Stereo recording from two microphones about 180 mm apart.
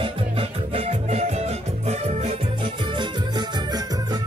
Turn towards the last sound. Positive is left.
turn(degrees=-25)  # may be behind; listen again after turning